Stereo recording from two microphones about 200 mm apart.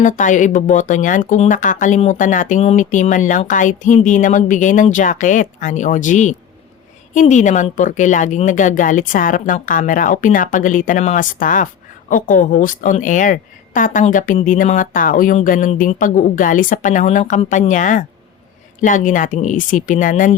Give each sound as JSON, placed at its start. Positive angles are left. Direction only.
{"t": 0.0, "sound": "a woman's voice", "side_deg": 40}